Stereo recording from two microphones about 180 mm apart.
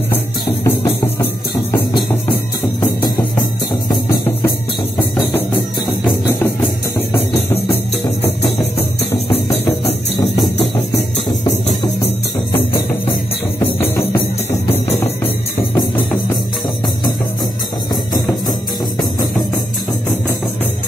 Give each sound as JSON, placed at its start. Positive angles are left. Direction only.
{"t": 0.7, "sound": "music", "side_deg": 15}
{"t": 2.8, "sound": "music", "side_deg": 10}
{"t": 6.0, "sound": "music", "side_deg": 10}
{"t": 13.6, "sound": "music", "side_deg": 15}
{"t": 15.7, "sound": "music", "side_deg": 15}